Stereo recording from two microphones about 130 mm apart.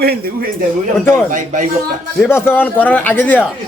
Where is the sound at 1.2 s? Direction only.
80° right.